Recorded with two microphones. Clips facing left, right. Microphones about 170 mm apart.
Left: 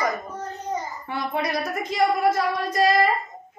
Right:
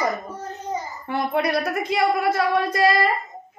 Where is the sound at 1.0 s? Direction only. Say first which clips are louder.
Right 6 dB; 60° right (ahead or behind).